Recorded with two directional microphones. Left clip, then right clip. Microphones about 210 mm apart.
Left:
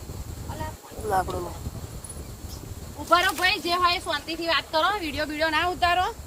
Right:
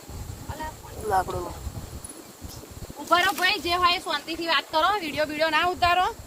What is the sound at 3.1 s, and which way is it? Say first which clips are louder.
A woman's voice: even; 15° right (ahead or behind).